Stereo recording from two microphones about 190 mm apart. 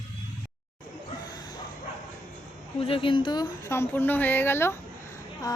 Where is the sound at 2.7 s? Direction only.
30° left (ahead or behind); by 4.7 s 10° left (ahead or behind).